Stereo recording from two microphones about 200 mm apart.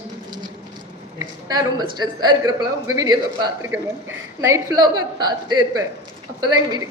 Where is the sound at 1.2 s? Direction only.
15° right (ahead or behind).